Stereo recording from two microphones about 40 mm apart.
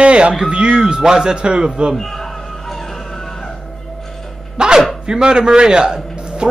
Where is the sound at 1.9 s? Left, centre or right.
Centre.